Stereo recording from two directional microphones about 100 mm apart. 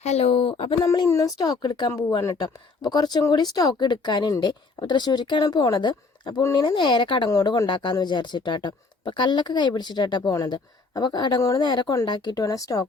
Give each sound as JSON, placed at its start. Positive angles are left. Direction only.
{"t": 0.0, "sound": "speech", "side_deg": 90}
{"t": 1.0, "sound": "speech", "side_deg": 30}
{"t": 7.3, "sound": "speech", "side_deg": 35}
{"t": 7.7, "sound": "speech", "side_deg": 50}
{"t": 11.6, "sound": "speech", "side_deg": 50}